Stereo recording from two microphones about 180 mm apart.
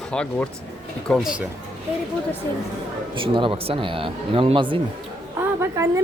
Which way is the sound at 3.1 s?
30° right (ahead or behind).